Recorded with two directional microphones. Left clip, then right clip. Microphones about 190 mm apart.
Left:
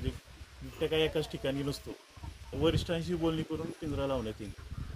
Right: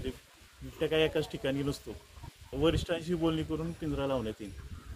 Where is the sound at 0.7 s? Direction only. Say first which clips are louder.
Right 1 dB; 5° right (ahead or behind).